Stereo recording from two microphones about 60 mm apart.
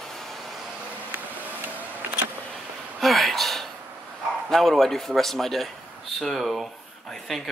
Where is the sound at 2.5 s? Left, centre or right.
Centre.